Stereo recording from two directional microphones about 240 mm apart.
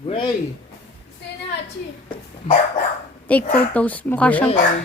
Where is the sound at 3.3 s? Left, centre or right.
Centre.